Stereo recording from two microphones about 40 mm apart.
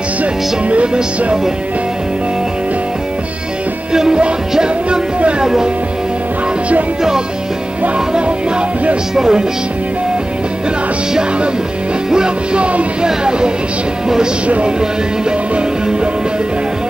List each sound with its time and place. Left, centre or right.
0.2 s music: right
0.9 s music: centre
3.9 s music: centre
5.4 s speech: centre
8.1 s music: right
9.1 s speech: centre
12.1 s music: right
14.0 s speech: centre
15.5 s music: right